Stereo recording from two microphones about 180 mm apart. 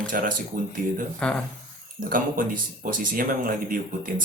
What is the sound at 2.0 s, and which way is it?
Speech, 50° right (ahead or behind).